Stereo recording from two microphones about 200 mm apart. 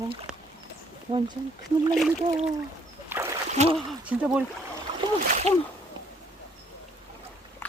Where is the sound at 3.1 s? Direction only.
10° right (ahead or behind).